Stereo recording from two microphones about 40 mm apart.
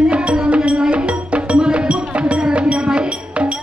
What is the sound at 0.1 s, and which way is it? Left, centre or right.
Music, right.